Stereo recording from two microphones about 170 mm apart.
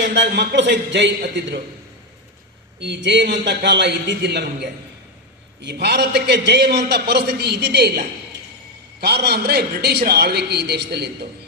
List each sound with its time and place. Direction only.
0.0 s a man's voice: 75° right (ahead or behind)
2.8 s a man's voice: 90° right
5.6 s a man's voice: 75° right (ahead or behind)